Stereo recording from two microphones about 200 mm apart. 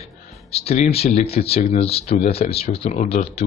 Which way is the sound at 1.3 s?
30° left (ahead or behind).